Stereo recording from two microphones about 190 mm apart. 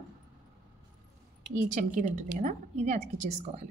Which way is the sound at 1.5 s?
40° right (ahead or behind).